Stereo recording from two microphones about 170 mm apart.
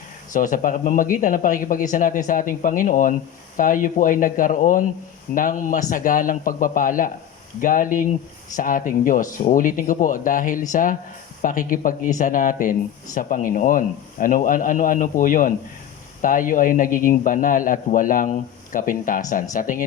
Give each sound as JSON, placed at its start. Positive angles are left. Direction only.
{"t": 0.3, "sound": "a man's voice", "side_deg": 50}